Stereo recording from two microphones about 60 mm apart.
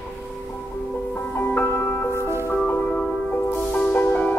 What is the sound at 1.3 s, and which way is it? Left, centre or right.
Music, left.